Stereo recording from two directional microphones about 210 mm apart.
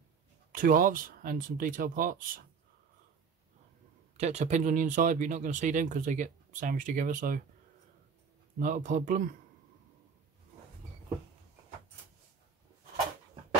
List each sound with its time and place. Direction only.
0.5 s speech: 40° right (ahead or behind)
4.2 s speech: 30° right (ahead or behind)
8.5 s speech: 40° right (ahead or behind)